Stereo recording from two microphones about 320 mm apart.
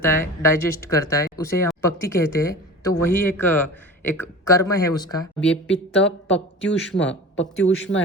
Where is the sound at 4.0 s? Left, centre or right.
Centre.